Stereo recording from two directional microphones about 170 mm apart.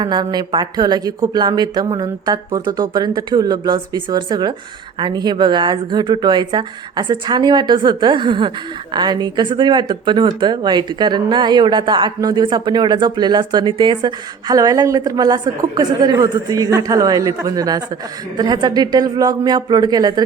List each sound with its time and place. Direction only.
0.0 s speech: 25° right (ahead or behind)